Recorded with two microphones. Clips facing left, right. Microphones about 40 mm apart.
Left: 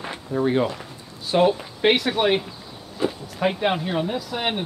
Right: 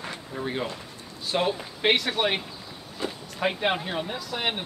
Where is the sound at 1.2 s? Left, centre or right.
Centre.